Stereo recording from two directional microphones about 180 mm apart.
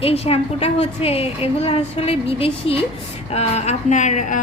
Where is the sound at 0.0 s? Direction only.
35° left (ahead or behind).